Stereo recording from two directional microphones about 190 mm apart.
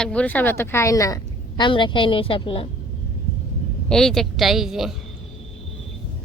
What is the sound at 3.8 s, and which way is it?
A woman's voice, centre (ahead or behind).